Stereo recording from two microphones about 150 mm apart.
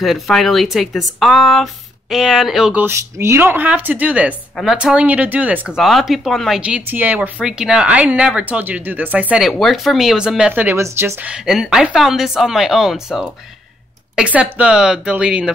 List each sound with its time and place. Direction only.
0.0 s speech: centre (ahead or behind)
9.5 s speech: centre (ahead or behind)